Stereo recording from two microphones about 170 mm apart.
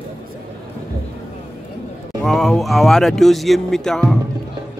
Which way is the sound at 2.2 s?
Centre (ahead or behind).